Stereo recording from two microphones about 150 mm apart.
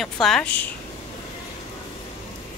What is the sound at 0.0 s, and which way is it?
Speech, centre (ahead or behind).